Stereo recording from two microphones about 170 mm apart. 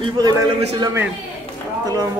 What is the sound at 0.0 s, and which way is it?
A man's voice, 25° right (ahead or behind).